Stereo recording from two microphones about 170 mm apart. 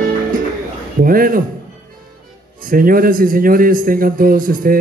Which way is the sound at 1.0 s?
55° right (ahead or behind).